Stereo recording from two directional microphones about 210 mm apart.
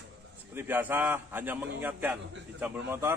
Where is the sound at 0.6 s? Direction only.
10° right (ahead or behind).